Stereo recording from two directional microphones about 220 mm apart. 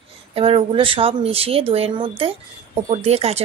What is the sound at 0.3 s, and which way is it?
Speech, 25° right (ahead or behind).